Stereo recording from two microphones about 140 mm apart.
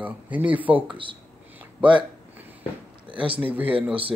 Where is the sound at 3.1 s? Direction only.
10° right (ahead or behind).